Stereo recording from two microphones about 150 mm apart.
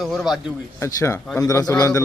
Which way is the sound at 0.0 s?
Centre (ahead or behind).